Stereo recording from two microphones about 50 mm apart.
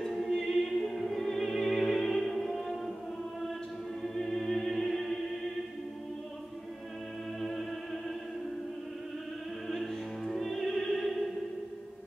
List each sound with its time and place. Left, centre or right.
0.0 s opera: centre
4.0 s music: centre
7.3 s music: centre
9.7 s opera: centre